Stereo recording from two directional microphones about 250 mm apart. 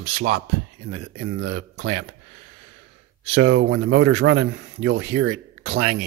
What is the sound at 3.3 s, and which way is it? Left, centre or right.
Speech, right.